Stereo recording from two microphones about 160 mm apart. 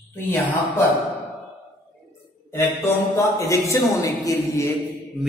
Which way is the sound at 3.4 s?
20° left (ahead or behind).